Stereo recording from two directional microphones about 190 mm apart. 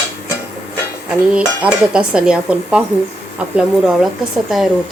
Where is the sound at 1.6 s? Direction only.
5° right (ahead or behind).